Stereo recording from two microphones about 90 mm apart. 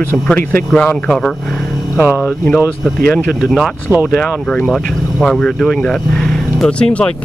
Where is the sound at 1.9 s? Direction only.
15° right (ahead or behind).